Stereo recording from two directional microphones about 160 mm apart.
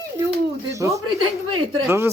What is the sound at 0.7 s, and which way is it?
Speech, 20° right (ahead or behind).